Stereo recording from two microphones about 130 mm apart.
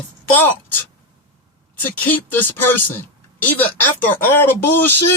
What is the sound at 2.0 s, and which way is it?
A woman's voice, 15° left (ahead or behind).